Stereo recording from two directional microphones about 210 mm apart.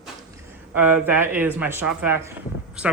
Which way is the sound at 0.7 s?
10° right (ahead or behind).